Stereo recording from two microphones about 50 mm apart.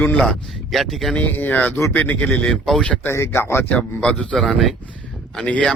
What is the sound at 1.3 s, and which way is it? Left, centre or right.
Speech, left.